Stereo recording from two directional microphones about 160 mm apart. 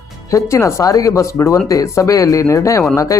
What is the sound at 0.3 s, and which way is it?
Speech, 20° left (ahead or behind).